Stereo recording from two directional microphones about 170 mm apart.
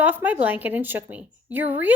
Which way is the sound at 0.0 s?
10° right (ahead or behind).